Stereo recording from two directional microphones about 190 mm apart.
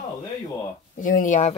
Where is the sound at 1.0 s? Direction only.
45° left (ahead or behind).